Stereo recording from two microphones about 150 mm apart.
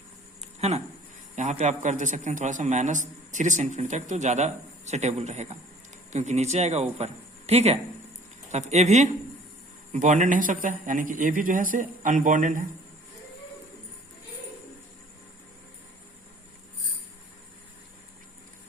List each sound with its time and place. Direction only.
0.6 s a man's voice: 45° right (ahead or behind)